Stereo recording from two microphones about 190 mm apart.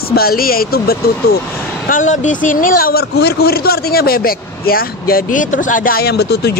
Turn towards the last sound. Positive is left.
turn(degrees=60)  # may be behind; listen again after turning